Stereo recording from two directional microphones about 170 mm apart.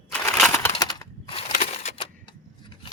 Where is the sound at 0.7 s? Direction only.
20° left (ahead or behind).